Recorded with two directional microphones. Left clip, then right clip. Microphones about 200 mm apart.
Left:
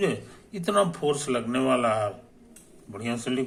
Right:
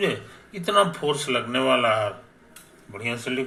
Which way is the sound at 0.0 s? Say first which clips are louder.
Right 2 dB; 20° left (ahead or behind).